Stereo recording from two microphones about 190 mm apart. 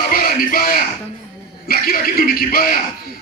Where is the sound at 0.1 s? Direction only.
50° left (ahead or behind).